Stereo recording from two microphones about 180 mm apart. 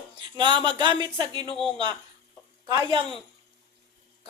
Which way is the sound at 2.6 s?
25° right (ahead or behind).